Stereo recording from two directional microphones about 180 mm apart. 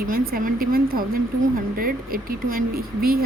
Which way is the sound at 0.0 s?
55° right (ahead or behind).